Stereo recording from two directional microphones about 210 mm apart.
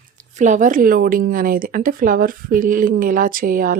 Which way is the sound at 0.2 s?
35° right (ahead or behind).